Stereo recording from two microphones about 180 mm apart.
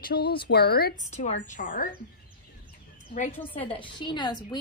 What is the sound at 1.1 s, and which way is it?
Speech, 40° left (ahead or behind).